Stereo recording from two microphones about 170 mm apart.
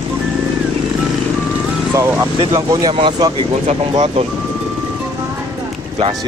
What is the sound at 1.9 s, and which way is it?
Speech, 15° right (ahead or behind).